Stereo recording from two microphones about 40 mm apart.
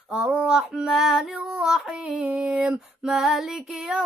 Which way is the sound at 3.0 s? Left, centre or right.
Centre.